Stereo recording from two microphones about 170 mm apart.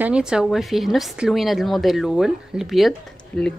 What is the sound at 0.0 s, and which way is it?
Speech, 5° right (ahead or behind).